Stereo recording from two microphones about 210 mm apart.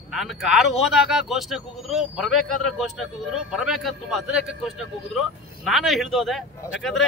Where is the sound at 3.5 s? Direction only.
Centre (ahead or behind).